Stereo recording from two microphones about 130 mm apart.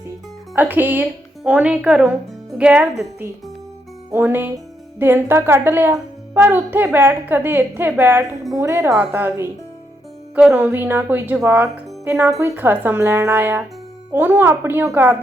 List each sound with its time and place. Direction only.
0.5 s speech: 15° right (ahead or behind)
4.1 s a woman's voice: 15° right (ahead or behind)
12.1 s speech: 5° right (ahead or behind)
12.4 s speech: 15° right (ahead or behind)